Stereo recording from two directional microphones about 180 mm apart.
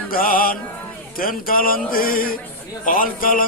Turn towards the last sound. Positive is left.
turn(degrees=50)  # may be behind; listen again after turning